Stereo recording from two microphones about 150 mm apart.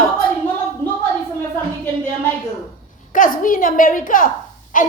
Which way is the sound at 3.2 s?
65° left (ahead or behind).